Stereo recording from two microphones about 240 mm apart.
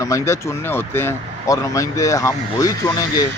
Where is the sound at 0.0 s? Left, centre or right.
Centre.